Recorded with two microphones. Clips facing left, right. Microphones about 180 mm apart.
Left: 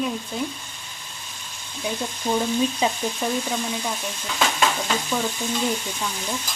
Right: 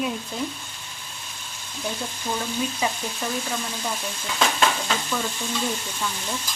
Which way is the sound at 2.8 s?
25° left (ahead or behind).